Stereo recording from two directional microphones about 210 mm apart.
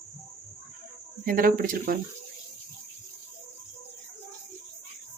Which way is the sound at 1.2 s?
45° right (ahead or behind).